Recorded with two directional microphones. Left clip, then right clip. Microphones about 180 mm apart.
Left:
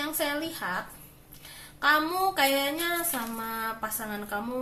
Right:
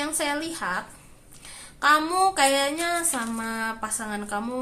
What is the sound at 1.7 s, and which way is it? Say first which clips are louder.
Speech: right 4 dB; 30° right (ahead or behind).